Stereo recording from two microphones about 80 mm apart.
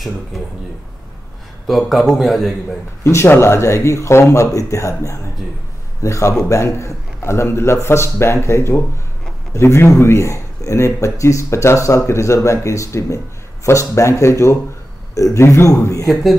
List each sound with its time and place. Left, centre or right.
1.7 s a man's voice: centre
3.0 s speech: left